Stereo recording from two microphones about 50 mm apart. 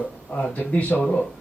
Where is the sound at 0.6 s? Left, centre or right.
Left.